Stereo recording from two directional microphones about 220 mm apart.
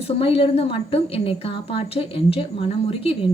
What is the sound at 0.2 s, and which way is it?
A woman's voice, 25° left (ahead or behind).